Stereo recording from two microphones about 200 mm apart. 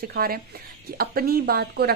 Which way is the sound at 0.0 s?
50° right (ahead or behind).